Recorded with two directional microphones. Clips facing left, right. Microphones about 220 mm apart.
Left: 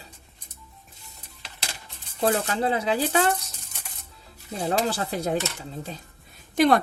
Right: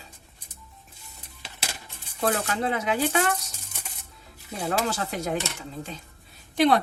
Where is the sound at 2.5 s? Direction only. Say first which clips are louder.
Left 2 dB; 30° left (ahead or behind).